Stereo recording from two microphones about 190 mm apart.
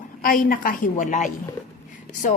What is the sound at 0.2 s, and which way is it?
A woman's voice, 45° left (ahead or behind).